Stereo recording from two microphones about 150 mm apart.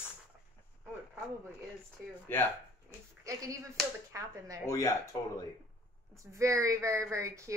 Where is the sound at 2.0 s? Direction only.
10° right (ahead or behind).